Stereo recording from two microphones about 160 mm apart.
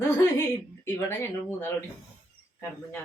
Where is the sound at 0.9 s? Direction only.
15° left (ahead or behind).